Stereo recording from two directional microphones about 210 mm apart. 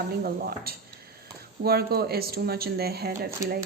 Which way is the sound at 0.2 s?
45° right (ahead or behind).